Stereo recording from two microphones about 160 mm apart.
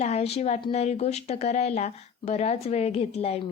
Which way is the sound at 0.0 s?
40° left (ahead or behind).